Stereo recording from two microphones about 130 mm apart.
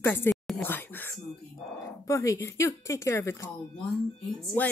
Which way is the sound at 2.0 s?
25° left (ahead or behind).